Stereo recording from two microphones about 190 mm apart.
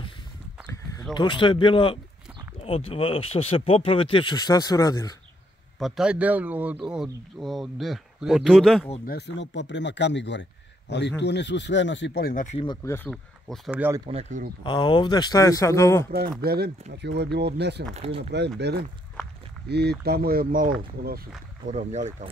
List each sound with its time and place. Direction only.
1.1 s speech: 25° left (ahead or behind)
5.8 s a man's voice: centre (ahead or behind)
9.0 s speech: 60° left (ahead or behind); by 12.6 s 40° left (ahead or behind)
12.6 s speech: 15° left (ahead or behind)
13.7 s a man's voice: 10° right (ahead or behind)
14.0 s speech: 35° right (ahead or behind)
14.6 s speech: 25° left (ahead or behind)
16.1 s speech: 55° right (ahead or behind)
17.9 s speech: 35° right (ahead or behind)
18.6 s speech: 60° right (ahead or behind); by 22.3 s 40° right (ahead or behind)